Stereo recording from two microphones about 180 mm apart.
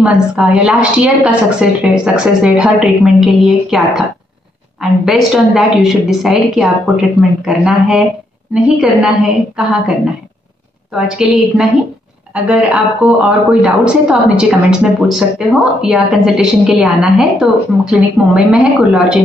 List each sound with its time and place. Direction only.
0.0 s a woman's voice: 5° right (ahead or behind)